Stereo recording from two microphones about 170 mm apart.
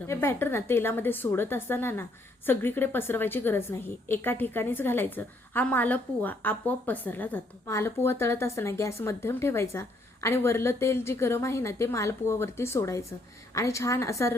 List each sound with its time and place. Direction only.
0.1 s a woman's voice: 15° left (ahead or behind)